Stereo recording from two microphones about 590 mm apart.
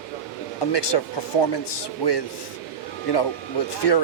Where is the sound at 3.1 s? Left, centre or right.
Left.